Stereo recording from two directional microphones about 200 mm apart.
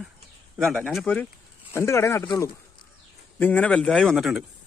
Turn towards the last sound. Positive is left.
turn(degrees=0)  # may be behind; listen again after turning